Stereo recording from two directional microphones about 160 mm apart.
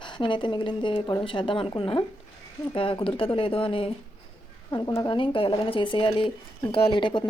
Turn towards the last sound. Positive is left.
turn(degrees=30)  # may be behind; listen again after turning